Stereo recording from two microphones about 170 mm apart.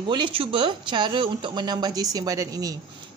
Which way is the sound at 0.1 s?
30° right (ahead or behind).